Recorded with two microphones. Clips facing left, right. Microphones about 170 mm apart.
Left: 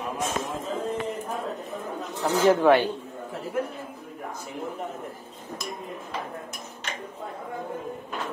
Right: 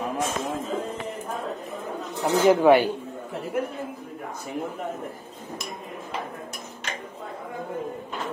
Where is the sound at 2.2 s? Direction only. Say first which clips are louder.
Right 2 dB; 10° right (ahead or behind).